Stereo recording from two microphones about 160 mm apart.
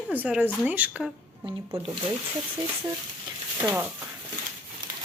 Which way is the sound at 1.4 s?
35° right (ahead or behind).